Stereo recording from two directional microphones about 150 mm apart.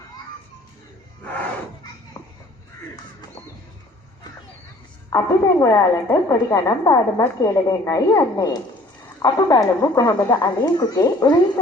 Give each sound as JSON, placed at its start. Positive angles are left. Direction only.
{"t": 1.3, "sound": "a sound", "side_deg": 10}
{"t": 2.2, "sound": "children playing", "side_deg": 15}
{"t": 5.1, "sound": "a woman's voice", "side_deg": 20}